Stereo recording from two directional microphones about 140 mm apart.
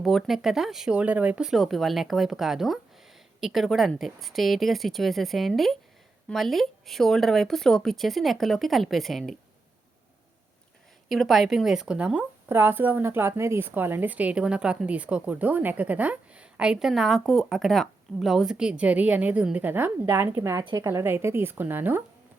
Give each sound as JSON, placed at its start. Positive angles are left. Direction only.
{"t": 0.0, "sound": "speech", "side_deg": 0}
{"t": 11.1, "sound": "speech", "side_deg": 0}